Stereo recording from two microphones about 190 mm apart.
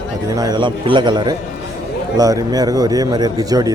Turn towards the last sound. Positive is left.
turn(degrees=-20)  # may be behind; listen again after turning